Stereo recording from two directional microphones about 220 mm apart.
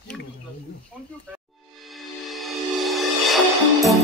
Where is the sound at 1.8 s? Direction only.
Centre (ahead or behind).